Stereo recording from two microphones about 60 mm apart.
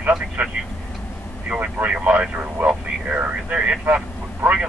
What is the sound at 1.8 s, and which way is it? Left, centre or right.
Speech, right.